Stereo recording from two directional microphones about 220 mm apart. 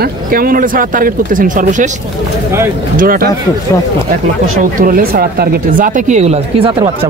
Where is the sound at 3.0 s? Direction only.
40° right (ahead or behind).